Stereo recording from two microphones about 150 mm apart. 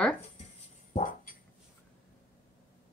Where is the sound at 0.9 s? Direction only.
60° left (ahead or behind).